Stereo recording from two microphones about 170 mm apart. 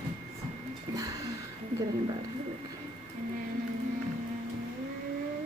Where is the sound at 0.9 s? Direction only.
20° right (ahead or behind).